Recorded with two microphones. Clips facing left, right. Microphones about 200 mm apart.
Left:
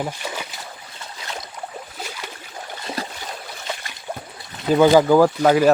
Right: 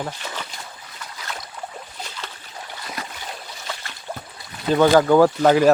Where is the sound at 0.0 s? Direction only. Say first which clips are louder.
Left 3 dB; 10° left (ahead or behind).